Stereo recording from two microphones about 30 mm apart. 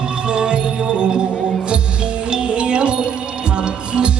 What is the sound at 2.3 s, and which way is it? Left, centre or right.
Music, right.